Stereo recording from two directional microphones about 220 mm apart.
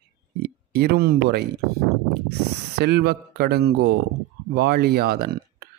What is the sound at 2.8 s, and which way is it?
Speech, 45° right (ahead or behind).